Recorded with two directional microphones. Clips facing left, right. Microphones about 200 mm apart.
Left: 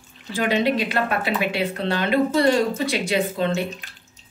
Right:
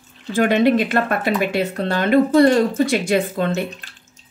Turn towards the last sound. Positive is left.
turn(degrees=-50)  # may be behind; listen again after turning